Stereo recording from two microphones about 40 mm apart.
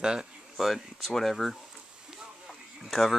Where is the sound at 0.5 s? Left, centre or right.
Centre.